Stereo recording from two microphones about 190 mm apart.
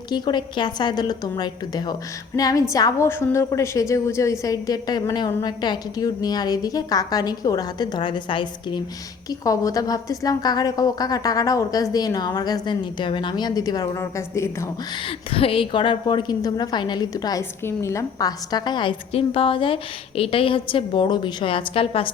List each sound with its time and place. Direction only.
0.1 s a woman's voice: 25° left (ahead or behind)
15.0 s a woman's voice: 30° left (ahead or behind)